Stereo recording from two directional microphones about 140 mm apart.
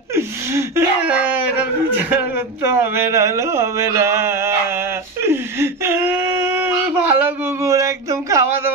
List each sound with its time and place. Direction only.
0.1 s gasp: 20° right (ahead or behind)
2.0 s speech: 10° right (ahead or behind)
5.2 s whimper: 15° right (ahead or behind)